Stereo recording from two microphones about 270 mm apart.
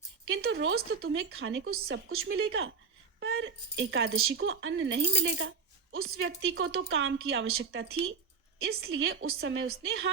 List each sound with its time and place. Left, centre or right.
0.4 s a woman's voice: right